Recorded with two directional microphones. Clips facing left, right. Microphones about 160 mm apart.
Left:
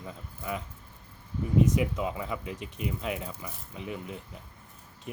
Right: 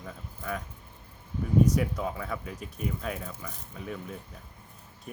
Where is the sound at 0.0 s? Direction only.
20° left (ahead or behind).